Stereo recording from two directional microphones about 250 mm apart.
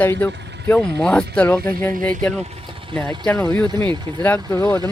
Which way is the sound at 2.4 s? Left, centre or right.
Right.